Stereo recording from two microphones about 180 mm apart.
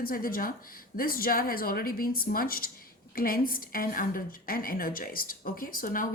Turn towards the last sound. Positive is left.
turn(degrees=50)  # may be behind; listen again after turning